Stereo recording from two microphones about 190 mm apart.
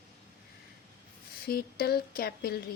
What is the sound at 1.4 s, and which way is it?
Speech, 55° left (ahead or behind).